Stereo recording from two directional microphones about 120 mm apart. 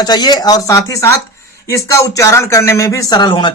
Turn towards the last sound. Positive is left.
turn(degrees=40)  # may be behind; listen again after turning